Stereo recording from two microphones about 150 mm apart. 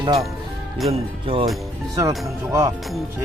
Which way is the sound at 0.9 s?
40° right (ahead or behind).